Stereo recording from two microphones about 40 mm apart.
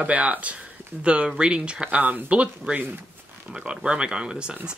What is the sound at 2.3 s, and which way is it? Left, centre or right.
Speech, right.